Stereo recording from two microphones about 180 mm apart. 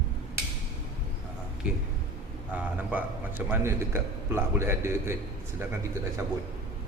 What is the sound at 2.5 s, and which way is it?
A man's voice, 10° right (ahead or behind).